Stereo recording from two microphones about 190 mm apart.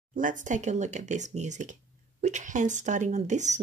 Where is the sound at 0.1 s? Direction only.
45° right (ahead or behind).